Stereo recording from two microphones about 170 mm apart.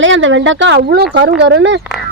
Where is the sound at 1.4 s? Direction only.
90° right.